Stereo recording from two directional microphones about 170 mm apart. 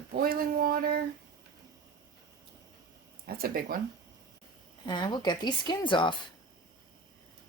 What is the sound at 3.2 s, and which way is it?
Speech, 60° right (ahead or behind).